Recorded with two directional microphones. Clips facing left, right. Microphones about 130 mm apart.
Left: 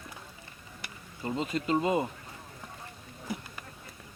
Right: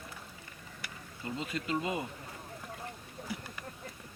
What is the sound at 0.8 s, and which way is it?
Speech, 30° left (ahead or behind).